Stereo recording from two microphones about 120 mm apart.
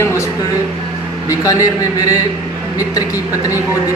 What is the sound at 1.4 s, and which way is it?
Speech, 30° left (ahead or behind).